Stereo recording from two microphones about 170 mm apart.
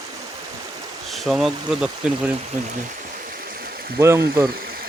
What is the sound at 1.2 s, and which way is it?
Speech, centre (ahead or behind).